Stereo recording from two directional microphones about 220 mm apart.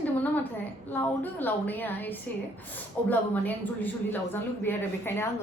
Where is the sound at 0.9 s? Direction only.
10° left (ahead or behind).